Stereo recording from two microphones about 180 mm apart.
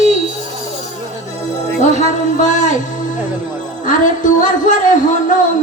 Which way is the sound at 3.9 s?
45° left (ahead or behind).